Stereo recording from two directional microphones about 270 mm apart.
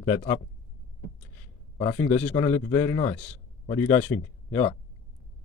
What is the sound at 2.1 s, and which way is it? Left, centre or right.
Speech, centre.